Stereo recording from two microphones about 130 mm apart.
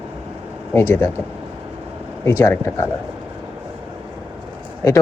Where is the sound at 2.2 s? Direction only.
20° left (ahead or behind).